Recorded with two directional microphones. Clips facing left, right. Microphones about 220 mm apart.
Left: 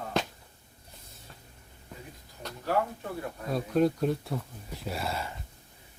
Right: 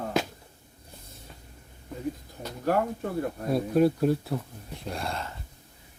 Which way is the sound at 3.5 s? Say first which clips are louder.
Right 3 dB; 5° right (ahead or behind).